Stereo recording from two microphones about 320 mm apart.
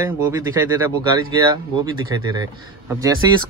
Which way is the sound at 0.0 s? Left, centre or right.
Centre.